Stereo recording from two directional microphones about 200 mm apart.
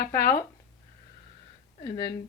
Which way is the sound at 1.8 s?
20° left (ahead or behind).